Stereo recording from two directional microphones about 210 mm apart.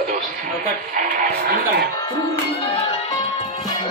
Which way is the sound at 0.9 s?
40° right (ahead or behind).